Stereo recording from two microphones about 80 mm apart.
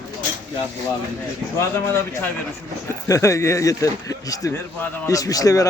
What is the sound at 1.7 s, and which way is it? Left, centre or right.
Speech, left.